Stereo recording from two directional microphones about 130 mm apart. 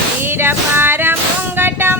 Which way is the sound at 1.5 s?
15° right (ahead or behind).